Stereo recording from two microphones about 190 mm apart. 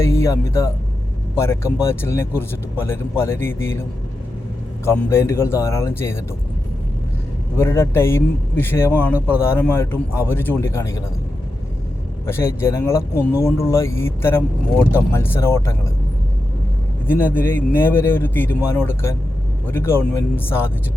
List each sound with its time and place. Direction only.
0.0 s speech: 15° left (ahead or behind)
4.9 s speech: 15° left (ahead or behind)
7.5 s speech: 15° left (ahead or behind)
12.2 s speech: 15° left (ahead or behind)
17.1 s speech: 10° left (ahead or behind)